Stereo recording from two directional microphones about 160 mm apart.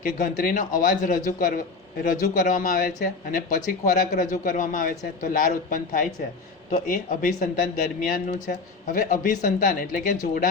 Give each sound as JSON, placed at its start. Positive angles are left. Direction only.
{"t": 0.0, "sound": "speech", "side_deg": 60}